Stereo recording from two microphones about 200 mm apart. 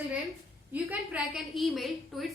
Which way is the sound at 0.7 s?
5° right (ahead or behind).